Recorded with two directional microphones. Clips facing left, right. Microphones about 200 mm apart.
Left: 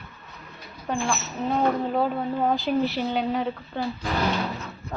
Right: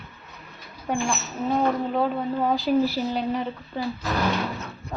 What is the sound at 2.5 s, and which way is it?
A woman's voice, centre (ahead or behind).